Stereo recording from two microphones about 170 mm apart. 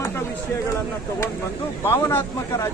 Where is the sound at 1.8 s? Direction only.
15° left (ahead or behind).